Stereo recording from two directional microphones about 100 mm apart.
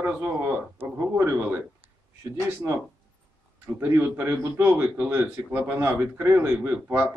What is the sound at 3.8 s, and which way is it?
A man's voice, 25° right (ahead or behind).